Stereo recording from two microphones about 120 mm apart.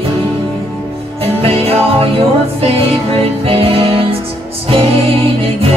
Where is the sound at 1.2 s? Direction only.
55° right (ahead or behind).